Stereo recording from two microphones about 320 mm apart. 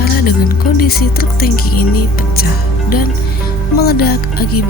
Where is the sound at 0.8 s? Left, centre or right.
Left.